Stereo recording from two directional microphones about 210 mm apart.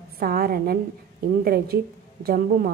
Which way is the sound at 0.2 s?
45° right (ahead or behind).